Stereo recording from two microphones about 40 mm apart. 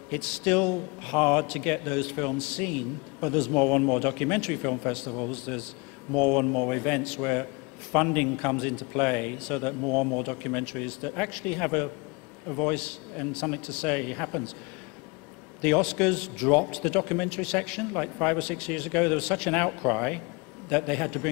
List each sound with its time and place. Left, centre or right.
0.1 s a man's voice: centre
15.6 s a man's voice: centre